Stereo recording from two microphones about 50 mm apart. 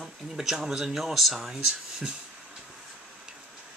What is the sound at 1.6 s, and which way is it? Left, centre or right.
Speech, centre.